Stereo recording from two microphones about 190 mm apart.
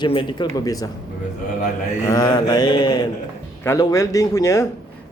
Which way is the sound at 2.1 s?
20° left (ahead or behind).